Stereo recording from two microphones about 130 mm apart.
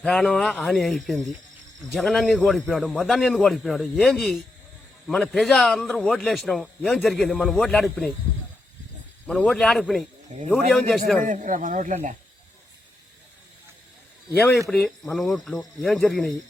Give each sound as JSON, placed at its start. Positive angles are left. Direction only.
{"t": 0.0, "sound": "a man's voice", "side_deg": 5}
{"t": 9.2, "sound": "a man's voice", "side_deg": 5}
{"t": 11.3, "sound": "speech", "side_deg": -75}
{"t": 14.7, "sound": "a man's voice", "side_deg": 5}